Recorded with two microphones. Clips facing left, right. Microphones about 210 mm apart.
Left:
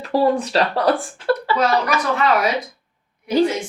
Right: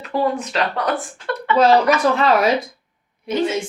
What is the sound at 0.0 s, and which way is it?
Speech, 35° left (ahead or behind).